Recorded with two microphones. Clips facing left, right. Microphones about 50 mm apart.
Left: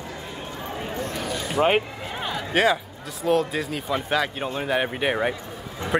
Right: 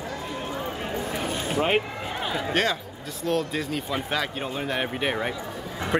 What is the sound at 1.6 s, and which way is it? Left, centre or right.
Speech, centre.